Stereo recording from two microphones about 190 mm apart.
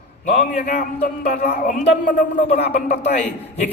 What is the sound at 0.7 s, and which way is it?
A man's voice, 50° left (ahead or behind).